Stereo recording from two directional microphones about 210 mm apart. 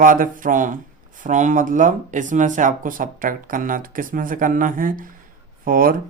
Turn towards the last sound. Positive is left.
turn(degrees=-40)  # may be behind; listen again after turning